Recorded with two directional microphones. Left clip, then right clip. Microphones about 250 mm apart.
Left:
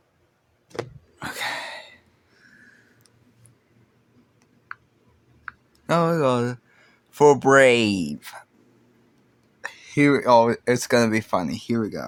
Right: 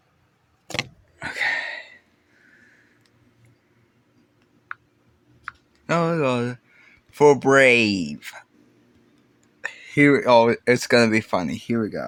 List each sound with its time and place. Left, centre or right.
1.2 s a sound: centre
5.8 s speech: centre
9.6 s speech: centre